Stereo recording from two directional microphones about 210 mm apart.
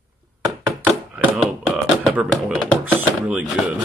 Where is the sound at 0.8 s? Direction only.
5° right (ahead or behind).